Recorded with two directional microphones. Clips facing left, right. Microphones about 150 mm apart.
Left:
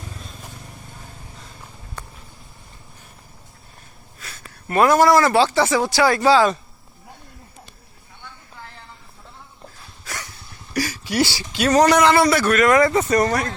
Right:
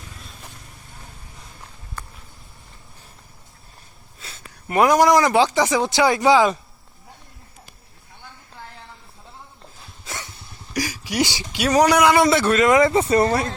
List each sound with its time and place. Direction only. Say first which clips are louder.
4.2 s speech: left 1 dB; 20° right (ahead or behind)
10.0 s a sound: even; 25° right (ahead or behind)
10.8 s a man's voice: left 2 dB; 10° right (ahead or behind)